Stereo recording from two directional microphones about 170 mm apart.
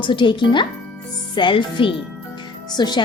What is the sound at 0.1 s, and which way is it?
A woman's voice, 30° left (ahead or behind).